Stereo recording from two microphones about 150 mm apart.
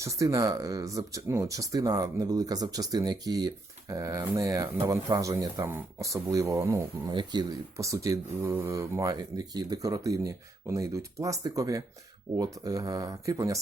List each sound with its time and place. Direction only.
0.0 s speech: 20° right (ahead or behind)